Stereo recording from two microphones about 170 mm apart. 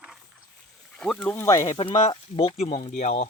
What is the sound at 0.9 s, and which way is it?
Speech, 5° left (ahead or behind).